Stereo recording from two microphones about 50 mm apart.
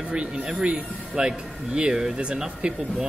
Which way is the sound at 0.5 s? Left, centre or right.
Right.